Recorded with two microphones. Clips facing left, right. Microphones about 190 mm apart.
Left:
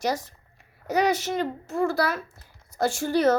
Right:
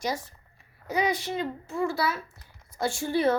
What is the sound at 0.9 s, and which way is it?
Speech, 75° left (ahead or behind).